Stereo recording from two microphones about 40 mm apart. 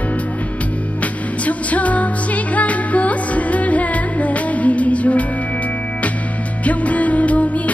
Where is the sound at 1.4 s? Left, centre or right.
Left.